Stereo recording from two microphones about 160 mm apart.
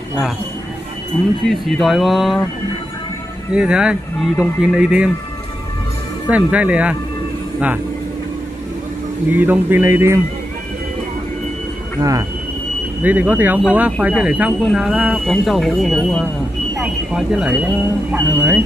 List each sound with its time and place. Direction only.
1.4 s speech: centre (ahead or behind)
3.5 s speech: 5° right (ahead or behind)
6.2 s a man's voice: 10° right (ahead or behind)
9.3 s a man's voice: 10° right (ahead or behind)
12.0 s speech: 20° right (ahead or behind)
13.0 s a man's voice: 10° right (ahead or behind)